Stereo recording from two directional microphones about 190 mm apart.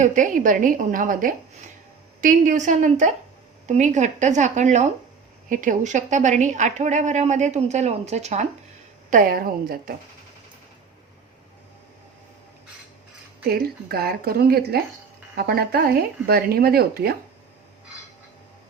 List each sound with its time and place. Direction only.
0.0 s a woman's voice: 40° right (ahead or behind)
13.5 s speech: 55° right (ahead or behind)